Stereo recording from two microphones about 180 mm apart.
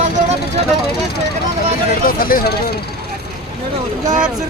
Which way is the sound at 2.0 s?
55° left (ahead or behind).